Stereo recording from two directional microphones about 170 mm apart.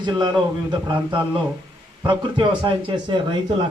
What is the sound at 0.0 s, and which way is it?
A man's voice, 25° right (ahead or behind).